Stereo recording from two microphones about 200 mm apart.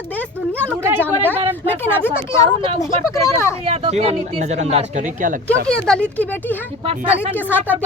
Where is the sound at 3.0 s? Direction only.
15° left (ahead or behind).